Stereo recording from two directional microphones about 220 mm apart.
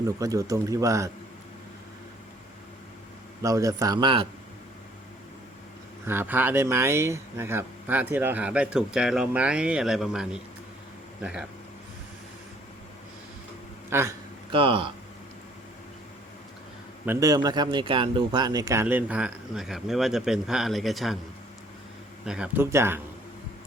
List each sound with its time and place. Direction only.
0.0 s speech: 15° right (ahead or behind)
3.4 s speech: 15° right (ahead or behind)
6.1 s speech: 10° right (ahead or behind)
13.9 s speech: 10° right (ahead or behind)
14.5 s speech: 25° right (ahead or behind)
17.1 s speech: 15° right (ahead or behind)
22.2 s speech: 5° right (ahead or behind)